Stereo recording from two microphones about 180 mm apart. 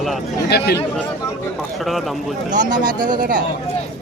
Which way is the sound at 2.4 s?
45° right (ahead or behind).